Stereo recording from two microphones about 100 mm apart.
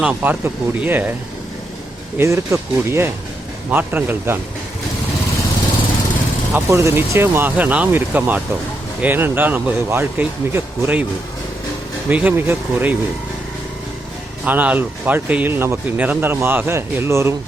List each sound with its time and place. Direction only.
0.0 s speech: 15° right (ahead or behind)
2.1 s speech: 30° right (ahead or behind)
6.5 s speech: 30° right (ahead or behind)
12.0 s speech: 15° right (ahead or behind)
14.4 s speech: 15° right (ahead or behind)